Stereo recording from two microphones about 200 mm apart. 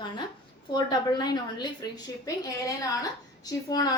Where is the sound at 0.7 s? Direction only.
20° left (ahead or behind).